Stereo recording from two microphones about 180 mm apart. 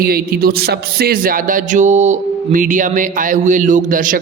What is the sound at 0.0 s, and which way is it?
A man's voice, 55° right (ahead or behind).